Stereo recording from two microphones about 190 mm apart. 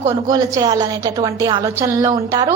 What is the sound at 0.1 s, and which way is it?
A woman's voice, 20° right (ahead or behind).